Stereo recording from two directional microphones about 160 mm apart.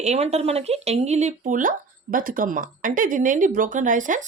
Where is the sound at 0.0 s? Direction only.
40° right (ahead or behind).